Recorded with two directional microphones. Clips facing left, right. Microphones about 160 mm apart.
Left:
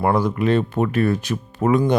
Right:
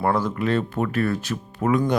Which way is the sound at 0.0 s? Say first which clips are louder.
Left 3 dB; 15° left (ahead or behind).